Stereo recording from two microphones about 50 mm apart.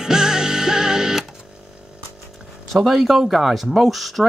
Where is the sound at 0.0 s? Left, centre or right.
Centre.